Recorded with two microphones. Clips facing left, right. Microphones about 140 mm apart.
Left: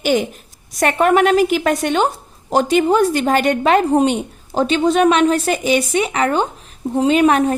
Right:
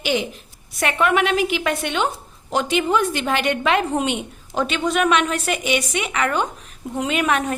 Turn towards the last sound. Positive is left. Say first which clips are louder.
# left 8 dB
turn(degrees=35)  # may be behind; listen again after turning